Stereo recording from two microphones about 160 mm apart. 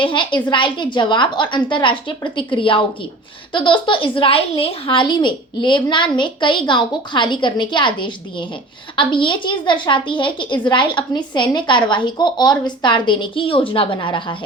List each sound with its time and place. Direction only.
0.0 s a woman's voice: 30° left (ahead or behind)